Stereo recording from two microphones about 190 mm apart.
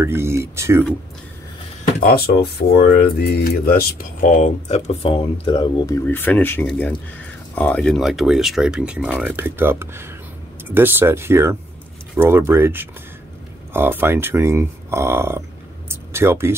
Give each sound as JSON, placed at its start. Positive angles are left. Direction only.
{"t": 0.0, "sound": "speech", "side_deg": -15}
{"t": 2.0, "sound": "speech", "side_deg": 50}
{"t": 6.0, "sound": "speech", "side_deg": 10}
{"t": 15.9, "sound": "a sound", "side_deg": -15}